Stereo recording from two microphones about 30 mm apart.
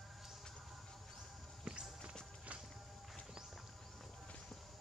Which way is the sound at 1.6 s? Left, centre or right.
Right.